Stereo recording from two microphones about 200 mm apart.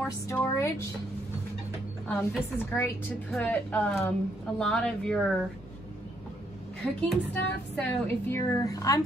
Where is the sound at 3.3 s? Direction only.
5° left (ahead or behind).